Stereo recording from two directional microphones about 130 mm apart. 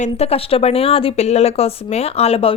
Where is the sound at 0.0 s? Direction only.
50° left (ahead or behind).